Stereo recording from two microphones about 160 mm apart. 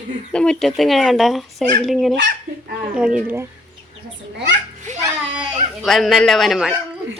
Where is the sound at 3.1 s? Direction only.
15° right (ahead or behind).